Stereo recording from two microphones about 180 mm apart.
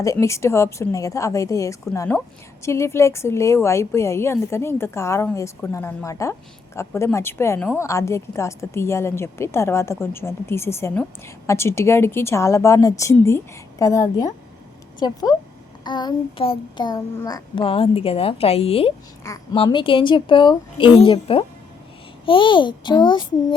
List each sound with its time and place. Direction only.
0.0 s a woman's voice: 15° left (ahead or behind)